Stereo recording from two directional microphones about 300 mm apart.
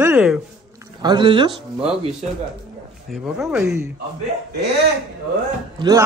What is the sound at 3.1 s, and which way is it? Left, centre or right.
Speech, centre.